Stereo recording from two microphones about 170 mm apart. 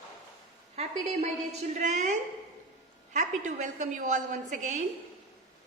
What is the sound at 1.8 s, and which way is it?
A woman's voice, 45° right (ahead or behind).